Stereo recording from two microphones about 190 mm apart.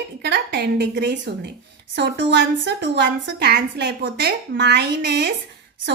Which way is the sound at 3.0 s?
55° right (ahead or behind).